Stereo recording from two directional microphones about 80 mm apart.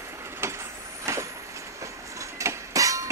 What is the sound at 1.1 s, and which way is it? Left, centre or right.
Vehicle, right.